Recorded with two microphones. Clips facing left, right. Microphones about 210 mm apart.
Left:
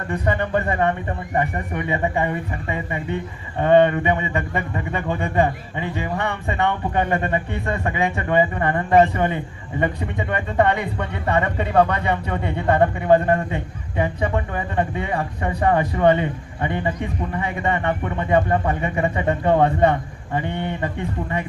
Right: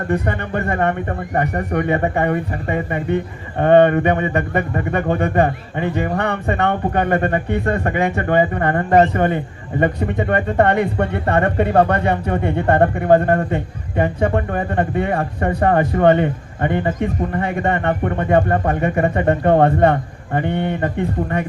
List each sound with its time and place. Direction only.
0.1 s speech: 50° right (ahead or behind)